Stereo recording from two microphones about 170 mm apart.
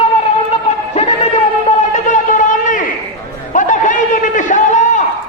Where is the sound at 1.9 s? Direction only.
50° left (ahead or behind).